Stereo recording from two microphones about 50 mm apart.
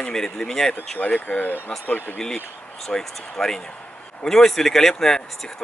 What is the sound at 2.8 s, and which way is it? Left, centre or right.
Speech, centre.